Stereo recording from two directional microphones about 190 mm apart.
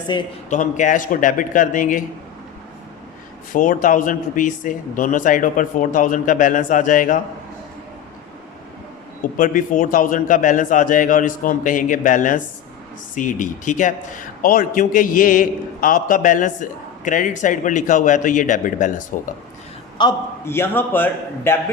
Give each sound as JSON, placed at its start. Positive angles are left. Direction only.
{"t": 0.1, "sound": "speech", "side_deg": 20}
{"t": 0.5, "sound": "a man's voice", "side_deg": 40}
{"t": 3.5, "sound": "a man's voice", "side_deg": 45}
{"t": 9.2, "sound": "a man's voice", "side_deg": 45}
{"t": 20.0, "sound": "a man's voice", "side_deg": 15}